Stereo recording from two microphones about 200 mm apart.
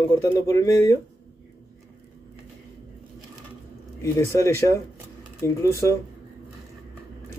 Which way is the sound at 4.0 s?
15° left (ahead or behind).